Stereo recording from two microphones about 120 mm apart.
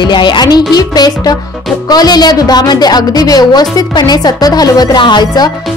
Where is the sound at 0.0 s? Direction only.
40° left (ahead or behind).